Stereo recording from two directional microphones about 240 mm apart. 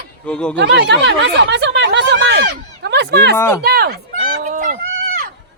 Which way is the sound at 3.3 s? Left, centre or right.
Centre.